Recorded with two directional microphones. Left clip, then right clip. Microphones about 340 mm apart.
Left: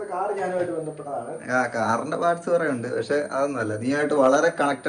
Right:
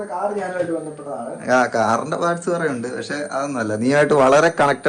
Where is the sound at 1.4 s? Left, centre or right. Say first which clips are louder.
Right 7 dB; centre.